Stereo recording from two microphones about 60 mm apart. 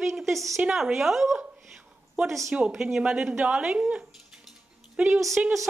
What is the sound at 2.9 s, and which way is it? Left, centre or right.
Speech, centre.